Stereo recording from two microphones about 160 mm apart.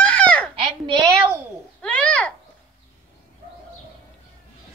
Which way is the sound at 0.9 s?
25° right (ahead or behind).